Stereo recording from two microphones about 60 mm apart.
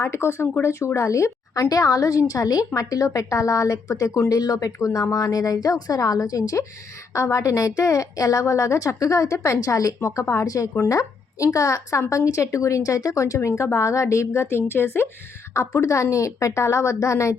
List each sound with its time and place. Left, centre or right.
0.0 s a woman's voice: left
4.3 s a woman's voice: left
5.1 s a woman's voice: left
7.1 s a woman's voice: left
15.5 s a woman's voice: left